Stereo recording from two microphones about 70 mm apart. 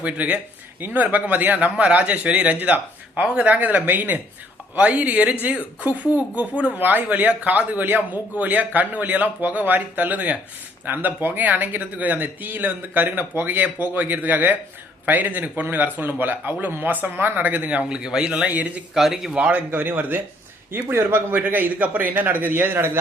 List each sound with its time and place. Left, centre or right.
0.0 s speech: right
18.9 s speech: centre
19.4 s speech: right